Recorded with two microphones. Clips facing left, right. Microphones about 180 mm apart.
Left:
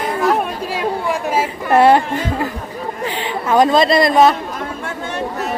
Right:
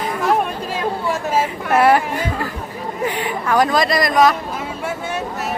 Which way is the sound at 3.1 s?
25° left (ahead or behind).